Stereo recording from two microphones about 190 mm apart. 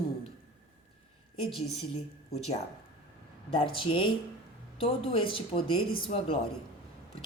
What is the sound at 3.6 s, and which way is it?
A woman's voice, 25° left (ahead or behind).